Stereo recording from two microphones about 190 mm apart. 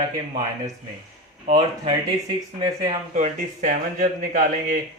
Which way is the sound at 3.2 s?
45° right (ahead or behind).